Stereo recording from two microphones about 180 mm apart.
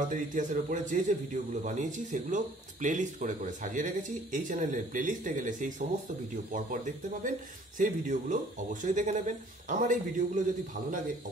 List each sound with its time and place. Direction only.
0.1 s a man's voice: 45° right (ahead or behind)